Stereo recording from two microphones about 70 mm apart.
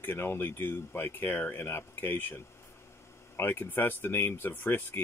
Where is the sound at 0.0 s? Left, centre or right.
Left.